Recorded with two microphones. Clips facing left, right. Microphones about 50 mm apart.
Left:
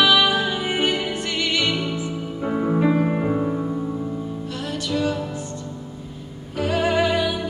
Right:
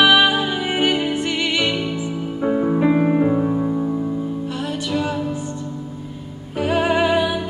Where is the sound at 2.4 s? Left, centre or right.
Centre.